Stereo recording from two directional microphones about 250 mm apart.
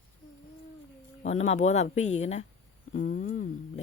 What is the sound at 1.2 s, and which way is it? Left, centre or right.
A man's voice, left.